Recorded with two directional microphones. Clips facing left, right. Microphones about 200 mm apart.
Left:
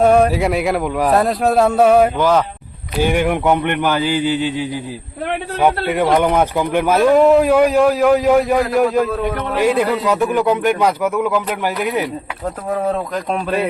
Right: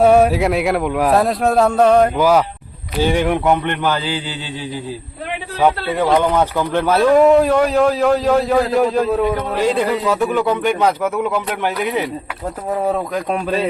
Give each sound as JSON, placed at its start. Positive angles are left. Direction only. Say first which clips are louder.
{"t": 0.0, "sound": "a man's voice", "louder": "right 1 dB", "side_deg": -5}
{"t": 2.1, "sound": "speech", "louder": "right 1 dB", "side_deg": -10}
{"t": 3.0, "sound": "a man's voice", "louder": "even", "side_deg": 10}
{"t": 5.6, "sound": "a man's voice", "louder": "even", "side_deg": 15}
{"t": 7.2, "sound": "a man's voice", "louder": "left 1 dB", "side_deg": 0}